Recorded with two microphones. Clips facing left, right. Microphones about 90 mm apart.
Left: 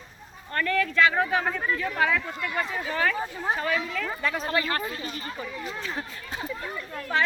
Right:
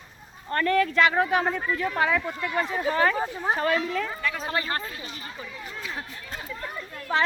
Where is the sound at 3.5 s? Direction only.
35° right (ahead or behind).